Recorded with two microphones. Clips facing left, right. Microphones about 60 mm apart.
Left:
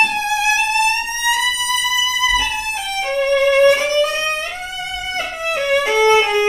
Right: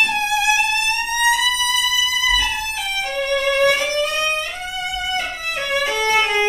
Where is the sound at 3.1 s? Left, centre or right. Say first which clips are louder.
Left 6 dB; left.